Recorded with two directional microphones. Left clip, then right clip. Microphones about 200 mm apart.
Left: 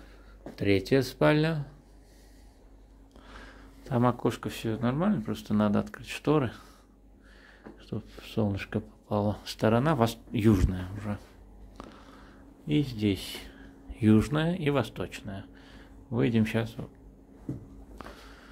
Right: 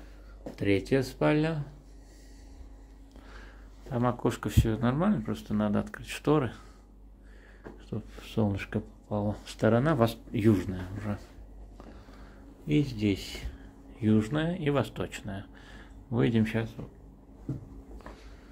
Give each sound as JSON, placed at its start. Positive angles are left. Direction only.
{"t": 0.6, "sound": "speech", "side_deg": 20}
{"t": 3.3, "sound": "a sound", "side_deg": 15}
{"t": 3.9, "sound": "speech", "side_deg": 20}
{"t": 4.3, "sound": "speech", "side_deg": 0}
{"t": 7.9, "sound": "speech", "side_deg": 5}
{"t": 9.1, "sound": "speech", "side_deg": 20}
{"t": 9.4, "sound": "speech", "side_deg": 10}
{"t": 12.6, "sound": "speech", "side_deg": 10}
{"t": 13.9, "sound": "speech", "side_deg": 35}
{"t": 17.9, "sound": "a sound", "side_deg": 30}